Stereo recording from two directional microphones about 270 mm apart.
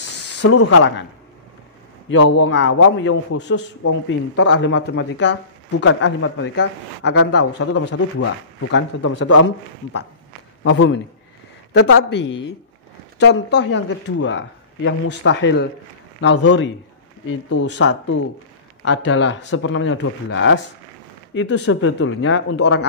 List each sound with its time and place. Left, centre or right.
0.4 s speech: left
2.0 s a man's voice: left
10.6 s a man's voice: left